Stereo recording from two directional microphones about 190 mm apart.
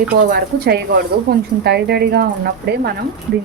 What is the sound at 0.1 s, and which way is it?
Speech, 55° right (ahead or behind).